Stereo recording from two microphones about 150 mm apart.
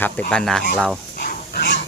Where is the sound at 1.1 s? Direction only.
80° left.